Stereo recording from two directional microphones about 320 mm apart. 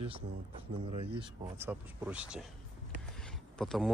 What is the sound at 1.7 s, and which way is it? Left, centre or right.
Speech, centre.